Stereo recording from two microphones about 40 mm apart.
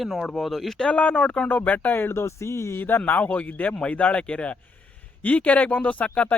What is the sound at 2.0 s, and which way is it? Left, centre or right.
Speech, left.